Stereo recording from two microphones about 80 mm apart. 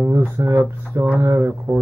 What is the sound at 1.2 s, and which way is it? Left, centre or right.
Speech, right.